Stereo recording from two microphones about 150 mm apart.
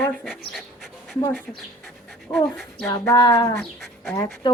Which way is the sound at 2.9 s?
25° left (ahead or behind).